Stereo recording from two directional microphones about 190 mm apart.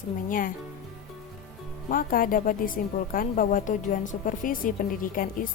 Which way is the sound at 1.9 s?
50° left (ahead or behind).